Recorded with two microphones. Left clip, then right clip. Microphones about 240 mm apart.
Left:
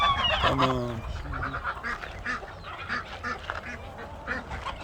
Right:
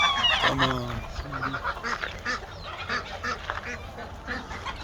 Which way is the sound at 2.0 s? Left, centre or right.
Centre.